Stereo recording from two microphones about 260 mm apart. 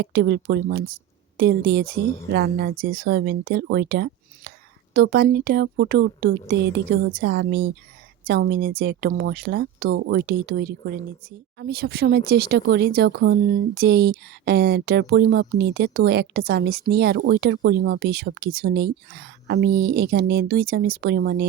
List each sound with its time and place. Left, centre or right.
0.0 s speech: right